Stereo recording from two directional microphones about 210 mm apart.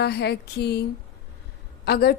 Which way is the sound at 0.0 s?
50° left (ahead or behind).